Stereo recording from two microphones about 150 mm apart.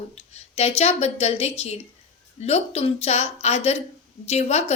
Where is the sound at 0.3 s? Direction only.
45° left (ahead or behind).